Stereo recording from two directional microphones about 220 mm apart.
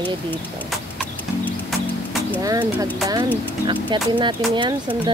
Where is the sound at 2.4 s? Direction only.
15° right (ahead or behind).